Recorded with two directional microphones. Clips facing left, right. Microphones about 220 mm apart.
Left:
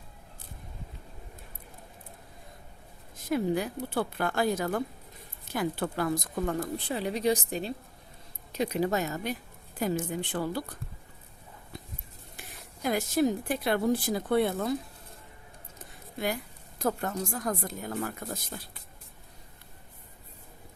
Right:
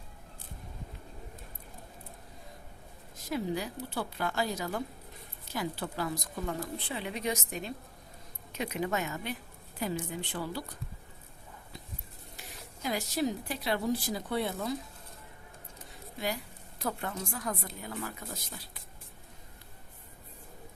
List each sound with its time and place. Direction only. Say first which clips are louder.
3.2 s a woman's voice: left 5 dB; 55° left (ahead or behind)
12.4 s a woman's voice: left 5 dB; 50° left (ahead or behind)
16.2 s a woman's voice: left 3 dB; 50° left (ahead or behind)